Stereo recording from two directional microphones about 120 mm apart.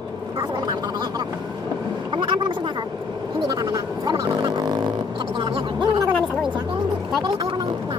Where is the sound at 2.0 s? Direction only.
40° right (ahead or behind).